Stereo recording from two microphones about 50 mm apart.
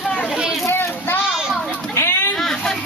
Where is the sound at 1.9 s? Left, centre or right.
Left.